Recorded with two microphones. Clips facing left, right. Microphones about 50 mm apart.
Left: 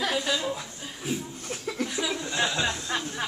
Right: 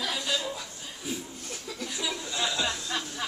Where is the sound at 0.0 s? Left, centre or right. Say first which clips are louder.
Left 4 dB; left.